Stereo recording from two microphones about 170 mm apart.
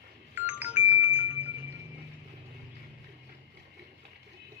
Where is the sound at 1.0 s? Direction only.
90° right.